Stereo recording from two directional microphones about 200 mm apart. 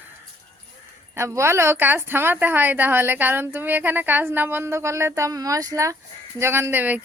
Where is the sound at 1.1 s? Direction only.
15° right (ahead or behind).